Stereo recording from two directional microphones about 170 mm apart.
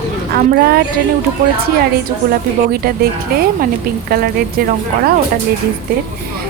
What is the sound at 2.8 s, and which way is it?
Speech, 60° right (ahead or behind).